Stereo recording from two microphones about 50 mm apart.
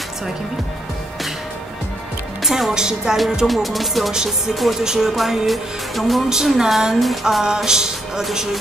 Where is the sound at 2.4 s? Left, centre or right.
Centre.